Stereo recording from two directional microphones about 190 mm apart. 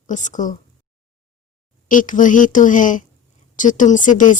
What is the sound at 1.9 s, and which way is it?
Speech, 45° left (ahead or behind).